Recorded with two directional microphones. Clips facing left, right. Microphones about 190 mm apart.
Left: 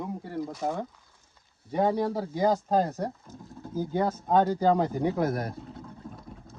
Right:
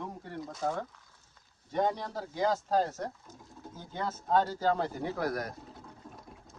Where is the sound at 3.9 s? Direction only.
15° left (ahead or behind).